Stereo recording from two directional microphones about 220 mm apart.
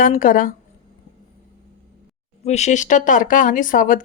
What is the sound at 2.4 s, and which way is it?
Speech, 30° left (ahead or behind).